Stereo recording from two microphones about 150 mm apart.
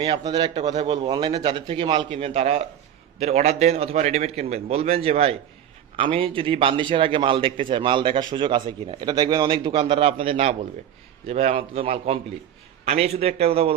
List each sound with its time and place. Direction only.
0.0 s a man's voice: 30° right (ahead or behind)